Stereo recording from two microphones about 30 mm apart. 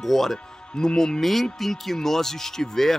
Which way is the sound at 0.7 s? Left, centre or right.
Centre.